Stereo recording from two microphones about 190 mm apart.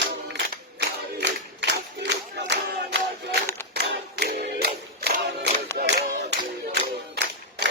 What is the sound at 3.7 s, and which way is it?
Clapping, 60° right (ahead or behind).